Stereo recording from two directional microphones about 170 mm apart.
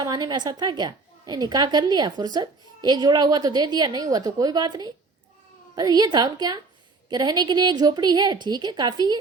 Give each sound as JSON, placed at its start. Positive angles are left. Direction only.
{"t": 0.0, "sound": "a woman's voice", "side_deg": -25}